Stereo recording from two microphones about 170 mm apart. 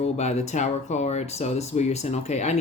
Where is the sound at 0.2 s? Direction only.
40° left (ahead or behind).